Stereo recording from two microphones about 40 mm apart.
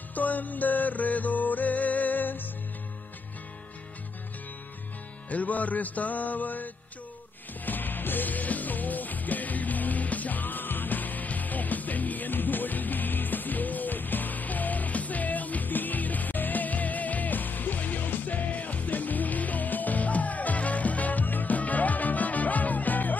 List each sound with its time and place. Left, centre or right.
0.1 s music: left
5.3 s music: left